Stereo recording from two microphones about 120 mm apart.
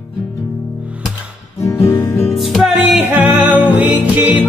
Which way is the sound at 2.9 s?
15° right (ahead or behind).